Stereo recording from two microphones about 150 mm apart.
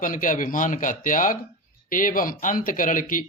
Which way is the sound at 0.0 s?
60° left (ahead or behind).